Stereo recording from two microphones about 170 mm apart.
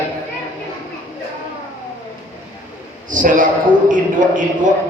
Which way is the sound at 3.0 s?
50° right (ahead or behind).